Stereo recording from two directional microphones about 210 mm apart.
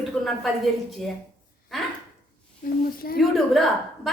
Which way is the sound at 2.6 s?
45° left (ahead or behind).